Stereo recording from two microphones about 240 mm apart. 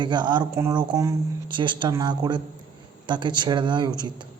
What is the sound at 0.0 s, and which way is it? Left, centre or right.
Speech, centre.